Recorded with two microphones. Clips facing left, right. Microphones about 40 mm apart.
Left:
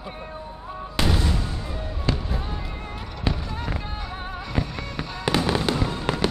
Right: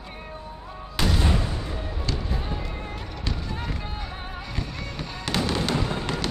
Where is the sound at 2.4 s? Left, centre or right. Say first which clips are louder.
Right 1 dB; centre.